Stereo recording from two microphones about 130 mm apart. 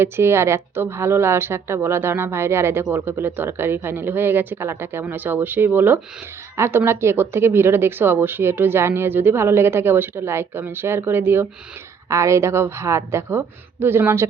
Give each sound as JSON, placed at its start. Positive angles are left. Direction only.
{"t": 0.0, "sound": "a woman's voice", "side_deg": -20}